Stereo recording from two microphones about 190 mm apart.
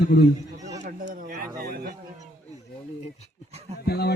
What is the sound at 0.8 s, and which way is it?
Speech, 45° right (ahead or behind).